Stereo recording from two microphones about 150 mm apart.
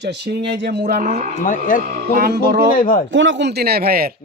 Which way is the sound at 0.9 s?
90° right.